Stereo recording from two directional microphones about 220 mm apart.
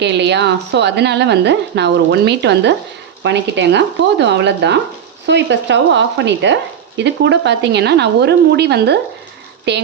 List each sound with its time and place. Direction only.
0.0 s speech: 50° right (ahead or behind)